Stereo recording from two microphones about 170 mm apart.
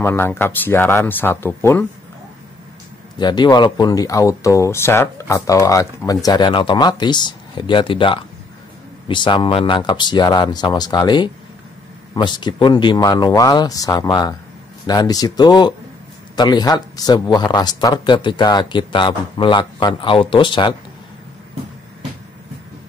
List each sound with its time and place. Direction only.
0.0 s speech: 15° left (ahead or behind)
3.2 s speech: 25° left (ahead or behind)